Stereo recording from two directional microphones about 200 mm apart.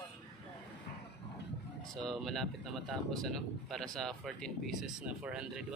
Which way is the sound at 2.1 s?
Centre (ahead or behind).